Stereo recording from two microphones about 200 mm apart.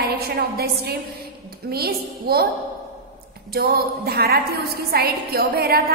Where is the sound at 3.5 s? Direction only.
50° right (ahead or behind).